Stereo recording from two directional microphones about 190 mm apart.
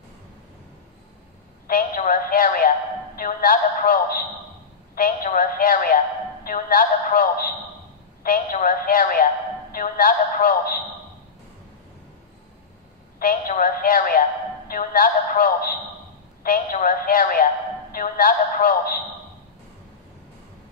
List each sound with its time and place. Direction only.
1.7 s a woman's voice: 50° left (ahead or behind)
13.2 s a woman's voice: 45° left (ahead or behind)